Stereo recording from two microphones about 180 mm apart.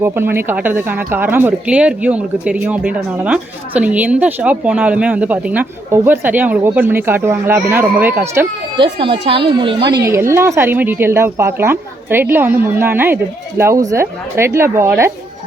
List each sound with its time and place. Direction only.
0.0 s speech: 15° right (ahead or behind)
8.8 s speech: 30° right (ahead or behind)